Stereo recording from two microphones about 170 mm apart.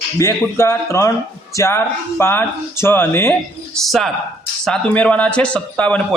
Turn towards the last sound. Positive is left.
turn(degrees=5)  # may be behind; listen again after turning